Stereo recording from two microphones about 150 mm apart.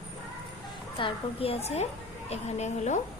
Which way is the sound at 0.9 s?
35° left (ahead or behind).